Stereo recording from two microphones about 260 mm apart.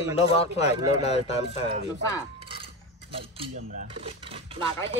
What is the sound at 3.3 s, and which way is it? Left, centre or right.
Speech, right.